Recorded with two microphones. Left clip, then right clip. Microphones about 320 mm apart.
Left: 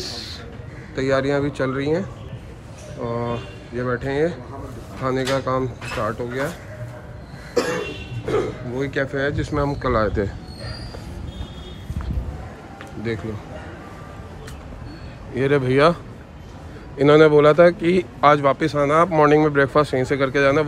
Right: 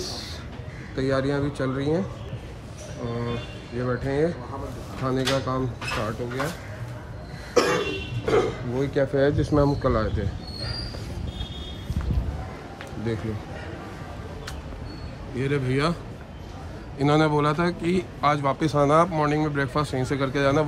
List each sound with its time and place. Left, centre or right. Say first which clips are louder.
0.0 s chicken: left 3 dB; centre
0.9 s a man's voice: left 5 dB; centre
3.1 s a man's voice: left 6 dB; centre
7.5 s cough: right 1 dB; centre
8.7 s speech: even; centre
15.3 s a man's voice: left 8 dB; centre
17.0 s a man's voice: left 9 dB; centre